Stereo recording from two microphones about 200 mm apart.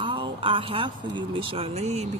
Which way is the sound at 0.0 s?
25° right (ahead or behind).